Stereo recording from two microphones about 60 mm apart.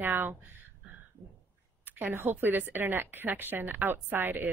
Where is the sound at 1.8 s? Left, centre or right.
Right.